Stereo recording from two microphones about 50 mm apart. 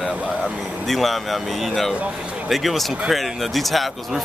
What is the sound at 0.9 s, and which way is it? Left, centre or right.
Speech, centre.